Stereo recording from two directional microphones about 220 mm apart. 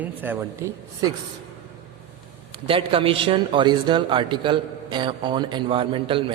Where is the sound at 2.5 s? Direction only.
25° right (ahead or behind).